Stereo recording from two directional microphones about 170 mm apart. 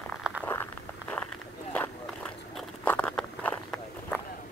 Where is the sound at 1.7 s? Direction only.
5° left (ahead or behind).